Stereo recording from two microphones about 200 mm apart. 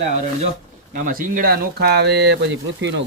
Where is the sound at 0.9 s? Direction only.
45° right (ahead or behind).